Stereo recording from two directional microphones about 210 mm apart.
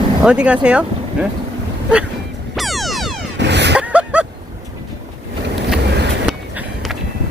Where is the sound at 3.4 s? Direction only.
55° right (ahead or behind).